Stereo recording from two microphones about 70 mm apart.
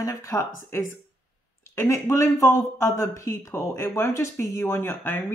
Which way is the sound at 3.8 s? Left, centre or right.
Left.